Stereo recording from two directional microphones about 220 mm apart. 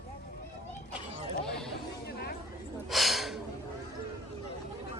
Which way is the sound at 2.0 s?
45° left (ahead or behind).